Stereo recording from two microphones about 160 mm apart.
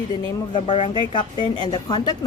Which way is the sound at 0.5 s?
30° left (ahead or behind).